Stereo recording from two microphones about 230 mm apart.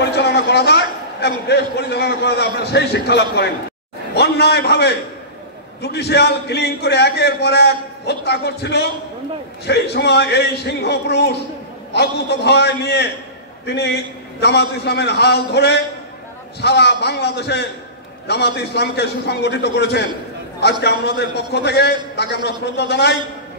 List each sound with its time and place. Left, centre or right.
0.0 s a man's voice: left